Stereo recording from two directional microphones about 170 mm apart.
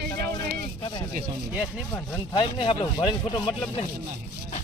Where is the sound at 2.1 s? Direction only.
25° left (ahead or behind).